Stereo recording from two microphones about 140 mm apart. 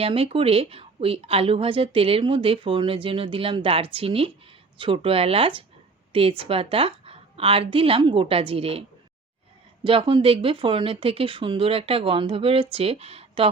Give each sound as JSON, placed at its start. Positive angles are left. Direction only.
{"t": 0.0, "sound": "a woman's voice", "side_deg": -45}
{"t": 9.8, "sound": "a woman's voice", "side_deg": -40}